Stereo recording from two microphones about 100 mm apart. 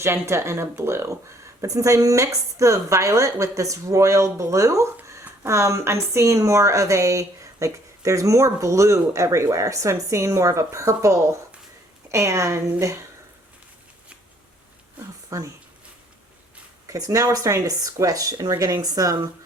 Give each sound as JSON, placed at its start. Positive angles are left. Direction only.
{"t": 0.0, "sound": "a woman's voice", "side_deg": -25}
{"t": 15.3, "sound": "a woman's voice", "side_deg": -35}
{"t": 16.8, "sound": "a woman's voice", "side_deg": -35}